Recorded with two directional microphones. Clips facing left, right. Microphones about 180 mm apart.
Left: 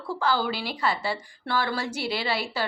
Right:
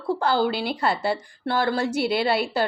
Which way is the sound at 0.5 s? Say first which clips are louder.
Right 4 dB; 55° right (ahead or behind).